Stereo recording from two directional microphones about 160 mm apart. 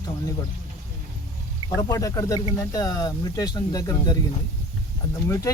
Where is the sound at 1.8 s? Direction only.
20° left (ahead or behind).